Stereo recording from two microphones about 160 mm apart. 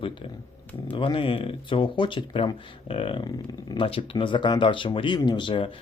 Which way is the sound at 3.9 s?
35° left (ahead or behind).